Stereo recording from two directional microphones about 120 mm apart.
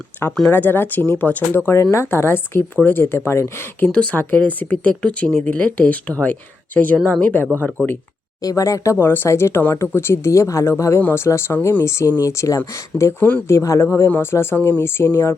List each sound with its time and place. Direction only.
0.5 s speech: 15° left (ahead or behind)
3.8 s speech: 10° left (ahead or behind)
8.4 s speech: 30° left (ahead or behind)